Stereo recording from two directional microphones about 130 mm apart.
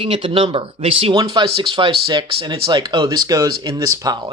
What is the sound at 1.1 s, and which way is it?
Speech, 35° right (ahead or behind).